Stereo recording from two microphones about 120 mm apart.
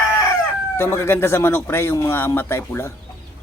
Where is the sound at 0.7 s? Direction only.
20° left (ahead or behind).